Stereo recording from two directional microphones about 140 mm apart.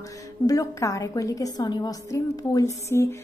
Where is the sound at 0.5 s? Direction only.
25° left (ahead or behind).